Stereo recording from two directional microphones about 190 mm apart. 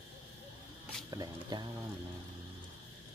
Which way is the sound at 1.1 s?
20° right (ahead or behind).